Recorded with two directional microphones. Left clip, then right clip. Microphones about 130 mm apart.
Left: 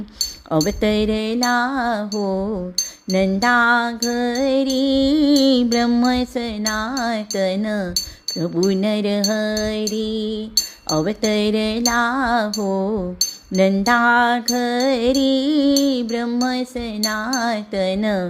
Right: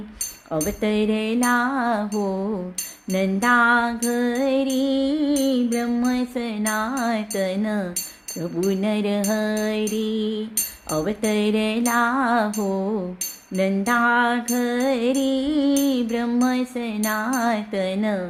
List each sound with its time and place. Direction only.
0.5 s music: 50° left (ahead or behind)
6.6 s music: 35° left (ahead or behind)
8.4 s music: 50° left (ahead or behind); by 10.3 s 30° left (ahead or behind)
10.5 s music: 45° left (ahead or behind)